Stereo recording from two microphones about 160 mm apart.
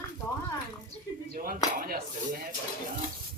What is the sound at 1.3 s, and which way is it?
Speech, 65° right (ahead or behind).